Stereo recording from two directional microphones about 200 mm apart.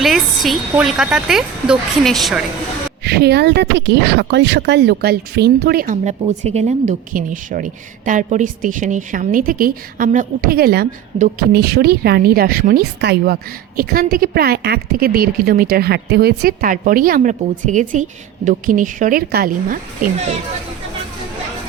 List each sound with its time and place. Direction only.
0.0 s speech: centre (ahead or behind)
3.0 s a woman's voice: 55° right (ahead or behind)